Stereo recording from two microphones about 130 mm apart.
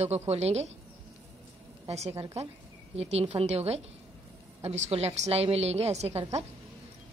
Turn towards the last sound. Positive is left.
turn(degrees=-55)  # may be behind; listen again after turning